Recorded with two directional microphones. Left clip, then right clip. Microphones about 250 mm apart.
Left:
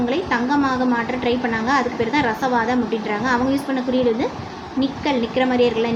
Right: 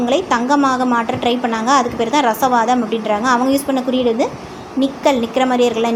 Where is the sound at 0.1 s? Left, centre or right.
Centre.